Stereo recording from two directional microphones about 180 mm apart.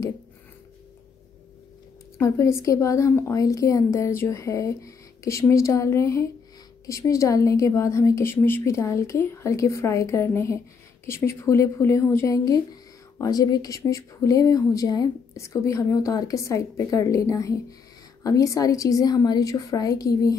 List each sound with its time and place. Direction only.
2.1 s a woman's voice: 15° left (ahead or behind)